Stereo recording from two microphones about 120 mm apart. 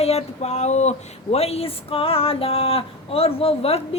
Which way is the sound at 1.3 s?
60° left (ahead or behind).